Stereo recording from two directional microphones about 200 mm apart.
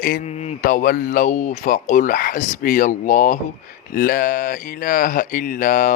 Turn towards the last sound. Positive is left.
turn(degrees=40)  # may be behind; listen again after turning